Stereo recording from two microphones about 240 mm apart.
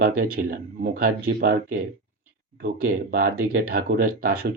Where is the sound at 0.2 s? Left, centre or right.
Right.